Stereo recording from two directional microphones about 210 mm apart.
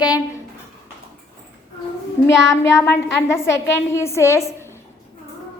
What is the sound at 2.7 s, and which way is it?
A woman's voice, 15° left (ahead or behind).